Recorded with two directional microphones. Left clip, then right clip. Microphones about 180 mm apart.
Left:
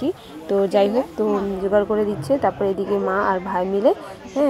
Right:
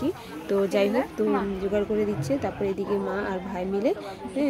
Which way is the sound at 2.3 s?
45° left (ahead or behind).